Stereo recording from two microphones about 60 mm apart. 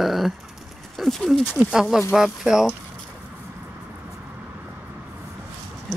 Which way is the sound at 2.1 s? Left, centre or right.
Centre.